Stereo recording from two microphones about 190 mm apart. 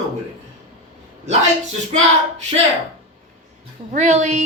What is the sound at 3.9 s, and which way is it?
Speech, 35° right (ahead or behind).